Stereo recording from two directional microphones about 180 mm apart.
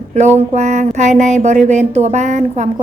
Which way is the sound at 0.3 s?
40° right (ahead or behind).